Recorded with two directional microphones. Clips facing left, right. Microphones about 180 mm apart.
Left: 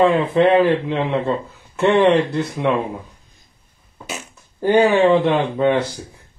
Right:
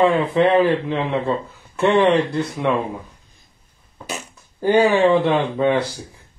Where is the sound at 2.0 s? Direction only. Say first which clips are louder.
Left 1 dB; 10° left (ahead or behind).